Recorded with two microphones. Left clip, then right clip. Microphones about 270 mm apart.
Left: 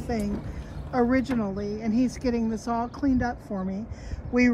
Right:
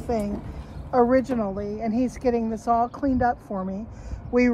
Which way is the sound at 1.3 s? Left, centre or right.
Centre.